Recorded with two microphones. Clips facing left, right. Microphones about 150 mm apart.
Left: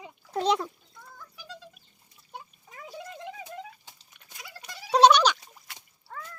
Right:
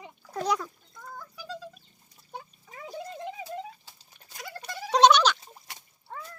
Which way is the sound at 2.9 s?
35° right (ahead or behind).